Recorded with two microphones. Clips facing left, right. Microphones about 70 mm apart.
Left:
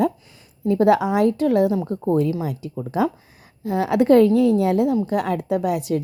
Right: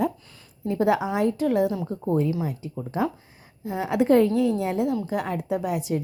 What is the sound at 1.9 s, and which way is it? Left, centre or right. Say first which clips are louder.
Speech: left 4 dB; left.